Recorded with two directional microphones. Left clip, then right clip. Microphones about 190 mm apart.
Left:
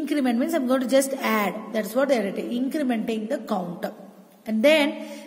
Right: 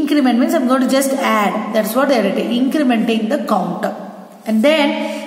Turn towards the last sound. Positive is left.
turn(degrees=45)  # may be behind; listen again after turning